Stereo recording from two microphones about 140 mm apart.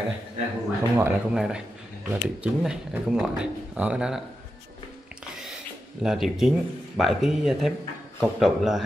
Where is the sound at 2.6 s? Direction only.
5° right (ahead or behind).